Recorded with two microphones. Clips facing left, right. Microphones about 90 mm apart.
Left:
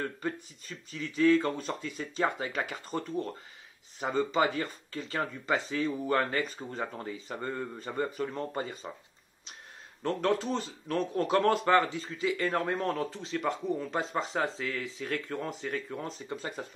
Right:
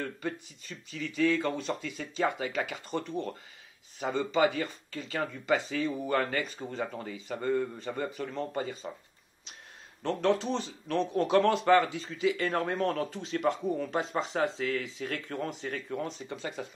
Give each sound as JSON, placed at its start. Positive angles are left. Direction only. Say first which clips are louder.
{"t": 0.2, "sound": "speech", "louder": "left 1 dB", "side_deg": 40}
{"t": 10.0, "sound": "speech", "louder": "right 1 dB", "side_deg": 45}